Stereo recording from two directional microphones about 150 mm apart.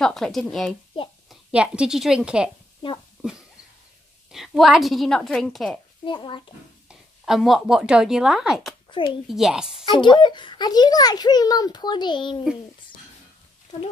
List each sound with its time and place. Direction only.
0.0 s a woman's voice: 5° left (ahead or behind)
2.8 s a child's voice: 35° left (ahead or behind)
4.3 s a woman's voice: centre (ahead or behind)
6.0 s a child's voice: 35° left (ahead or behind)
6.9 s a woman's voice: centre (ahead or behind)
9.8 s a child's voice: 30° left (ahead or behind)